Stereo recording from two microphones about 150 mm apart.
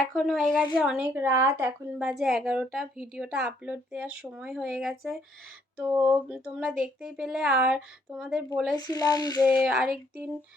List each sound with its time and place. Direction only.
0.0 s a woman's voice: centre (ahead or behind)
5.7 s a sound: 10° right (ahead or behind)
6.8 s a woman's voice: 5° right (ahead or behind)
8.7 s speech: 25° left (ahead or behind)
9.6 s a woman's voice: 5° right (ahead or behind)